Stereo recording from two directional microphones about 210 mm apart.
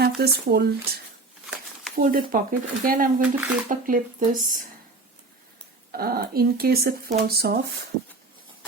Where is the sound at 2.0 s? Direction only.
40° right (ahead or behind).